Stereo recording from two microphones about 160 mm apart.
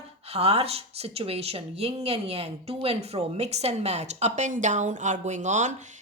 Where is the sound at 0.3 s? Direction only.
40° right (ahead or behind).